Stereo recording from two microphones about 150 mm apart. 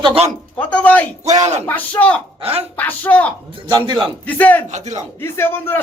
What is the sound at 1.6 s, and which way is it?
Speech, 10° left (ahead or behind).